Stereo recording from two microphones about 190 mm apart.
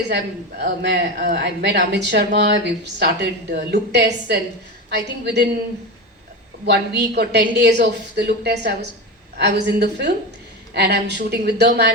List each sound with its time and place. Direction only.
0.6 s speech: 60° right (ahead or behind)
6.7 s speech: 60° right (ahead or behind)